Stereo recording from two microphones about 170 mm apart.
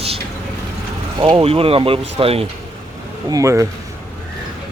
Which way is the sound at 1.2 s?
30° right (ahead or behind).